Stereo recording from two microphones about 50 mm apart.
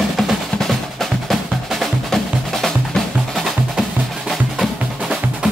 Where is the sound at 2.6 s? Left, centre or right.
Centre.